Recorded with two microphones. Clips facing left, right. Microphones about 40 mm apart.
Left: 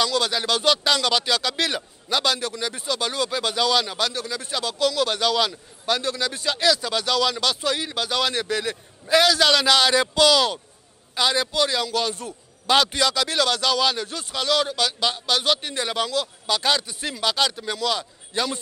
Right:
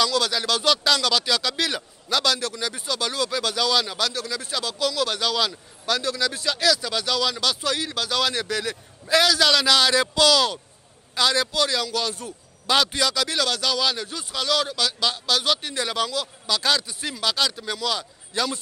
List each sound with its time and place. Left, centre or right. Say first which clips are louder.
0.0 s a man's voice: even; centre